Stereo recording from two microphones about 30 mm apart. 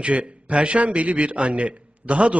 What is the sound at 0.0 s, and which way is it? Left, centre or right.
A man's voice, right.